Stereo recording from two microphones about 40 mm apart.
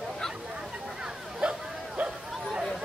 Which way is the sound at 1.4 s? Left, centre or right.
Right.